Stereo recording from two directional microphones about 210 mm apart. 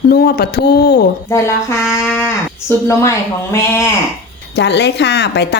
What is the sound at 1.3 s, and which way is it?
Speech, 10° left (ahead or behind).